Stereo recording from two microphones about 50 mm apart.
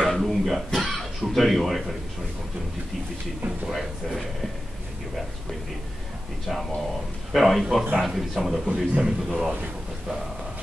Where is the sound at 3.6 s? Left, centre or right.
Centre.